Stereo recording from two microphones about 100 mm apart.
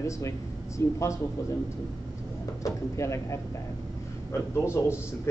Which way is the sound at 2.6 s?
30° left (ahead or behind).